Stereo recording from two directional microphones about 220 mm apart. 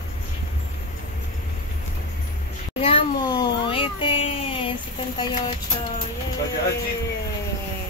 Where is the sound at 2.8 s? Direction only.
20° left (ahead or behind).